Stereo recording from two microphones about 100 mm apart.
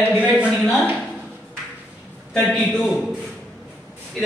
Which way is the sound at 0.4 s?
5° right (ahead or behind).